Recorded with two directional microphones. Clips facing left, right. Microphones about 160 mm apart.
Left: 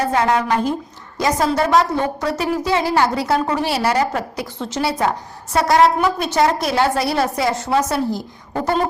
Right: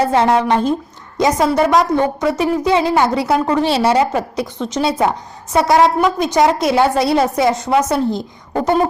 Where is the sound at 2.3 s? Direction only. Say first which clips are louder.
Right 4 dB; 20° right (ahead or behind).